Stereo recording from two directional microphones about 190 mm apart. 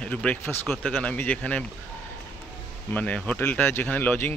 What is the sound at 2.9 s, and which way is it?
Speech, 10° left (ahead or behind).